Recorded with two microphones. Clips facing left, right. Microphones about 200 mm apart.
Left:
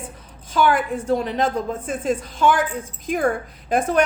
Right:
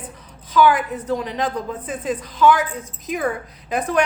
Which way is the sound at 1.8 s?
45° left (ahead or behind).